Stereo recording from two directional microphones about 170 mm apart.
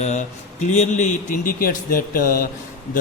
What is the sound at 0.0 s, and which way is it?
A man's voice, 45° left (ahead or behind).